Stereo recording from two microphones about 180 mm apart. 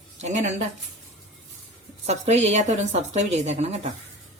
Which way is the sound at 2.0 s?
40° right (ahead or behind).